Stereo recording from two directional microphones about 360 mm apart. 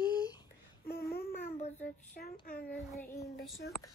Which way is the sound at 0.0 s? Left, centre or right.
Centre.